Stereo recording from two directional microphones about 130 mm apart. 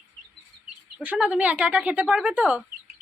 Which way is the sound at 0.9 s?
10° right (ahead or behind).